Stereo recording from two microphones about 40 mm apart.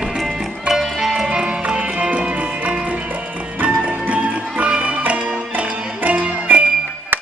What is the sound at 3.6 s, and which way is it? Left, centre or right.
Music, right.